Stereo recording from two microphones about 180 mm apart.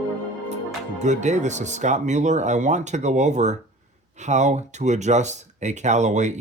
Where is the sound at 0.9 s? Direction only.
40° right (ahead or behind).